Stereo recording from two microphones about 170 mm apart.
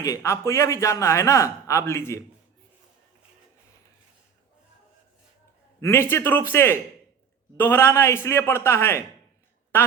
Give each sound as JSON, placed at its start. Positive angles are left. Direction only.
{"t": 0.0, "sound": "a man's voice", "side_deg": 20}
{"t": 5.8, "sound": "a man's voice", "side_deg": 15}